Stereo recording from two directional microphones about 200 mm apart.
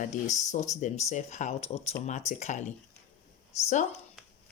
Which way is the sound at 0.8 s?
35° left (ahead or behind).